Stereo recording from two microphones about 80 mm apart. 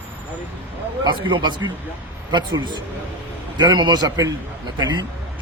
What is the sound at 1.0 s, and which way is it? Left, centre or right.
A man's voice, right.